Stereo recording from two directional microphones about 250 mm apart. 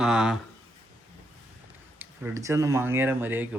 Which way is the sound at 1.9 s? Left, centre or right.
Centre.